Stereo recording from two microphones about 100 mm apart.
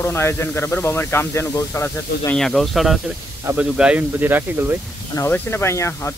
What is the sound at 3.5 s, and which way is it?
Speech, 10° right (ahead or behind).